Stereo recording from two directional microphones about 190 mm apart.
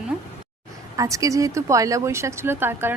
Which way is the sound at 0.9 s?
15° right (ahead or behind).